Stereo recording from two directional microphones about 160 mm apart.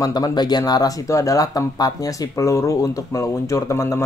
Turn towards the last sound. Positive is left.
turn(degrees=20)  # may be behind; listen again after turning